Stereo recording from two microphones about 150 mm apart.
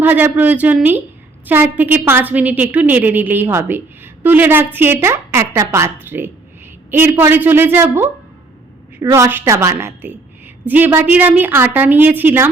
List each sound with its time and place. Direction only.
0.0 s a woman's voice: 10° right (ahead or behind)